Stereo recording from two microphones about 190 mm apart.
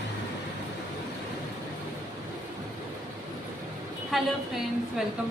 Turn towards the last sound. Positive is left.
turn(degrees=-5)  # may be behind; listen again after turning